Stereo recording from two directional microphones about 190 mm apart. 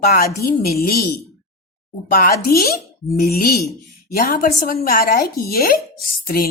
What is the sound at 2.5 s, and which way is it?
Speech, 55° left (ahead or behind).